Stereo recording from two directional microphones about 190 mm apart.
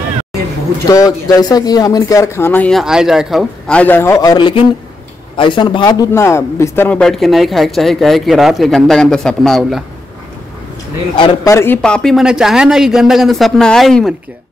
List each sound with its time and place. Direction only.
0.8 s speech: 20° left (ahead or behind)
2.8 s a man's voice: 5° right (ahead or behind)
11.1 s speech: 25° left (ahead or behind)
11.5 s a man's voice: 10° left (ahead or behind)